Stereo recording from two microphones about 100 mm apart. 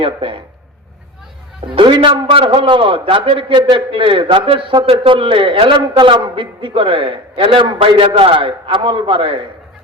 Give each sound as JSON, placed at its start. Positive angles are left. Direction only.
{"t": 0.0, "sound": "a man's voice", "side_deg": -60}
{"t": 1.7, "sound": "a man's voice", "side_deg": -60}